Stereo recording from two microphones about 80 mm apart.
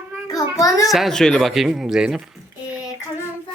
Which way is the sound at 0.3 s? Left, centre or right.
Left.